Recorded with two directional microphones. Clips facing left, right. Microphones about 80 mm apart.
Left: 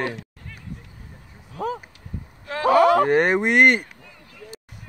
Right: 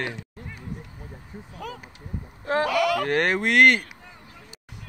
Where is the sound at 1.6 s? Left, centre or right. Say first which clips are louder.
Left 10 dB; left.